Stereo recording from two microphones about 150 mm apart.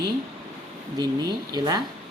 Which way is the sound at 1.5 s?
25° right (ahead or behind).